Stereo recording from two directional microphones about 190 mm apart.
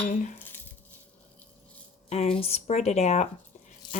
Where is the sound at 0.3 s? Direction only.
10° left (ahead or behind).